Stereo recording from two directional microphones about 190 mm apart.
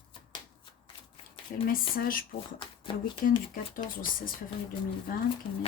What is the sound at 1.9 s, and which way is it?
Speech, 50° left (ahead or behind).